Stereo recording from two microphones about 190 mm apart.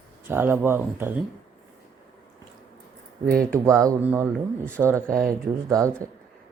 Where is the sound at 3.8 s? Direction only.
10° right (ahead or behind).